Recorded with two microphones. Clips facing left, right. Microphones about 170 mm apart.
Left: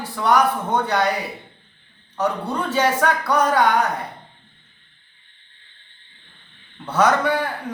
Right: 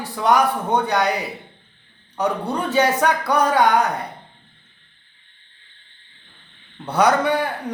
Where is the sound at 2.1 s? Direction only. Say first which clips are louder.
Right 1 dB; 15° right (ahead or behind).